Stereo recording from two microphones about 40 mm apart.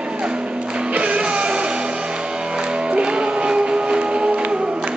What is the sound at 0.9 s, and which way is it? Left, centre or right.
Music, right.